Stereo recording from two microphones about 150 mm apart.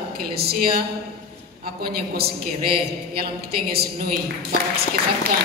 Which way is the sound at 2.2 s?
90° right.